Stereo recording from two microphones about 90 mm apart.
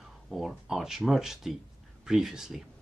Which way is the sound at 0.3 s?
Centre (ahead or behind).